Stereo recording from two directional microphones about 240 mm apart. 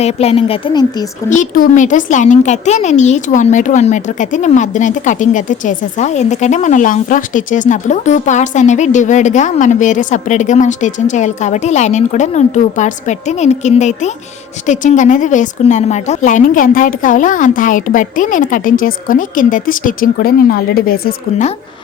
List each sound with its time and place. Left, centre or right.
0.0 s speech: left
1.3 s speech: left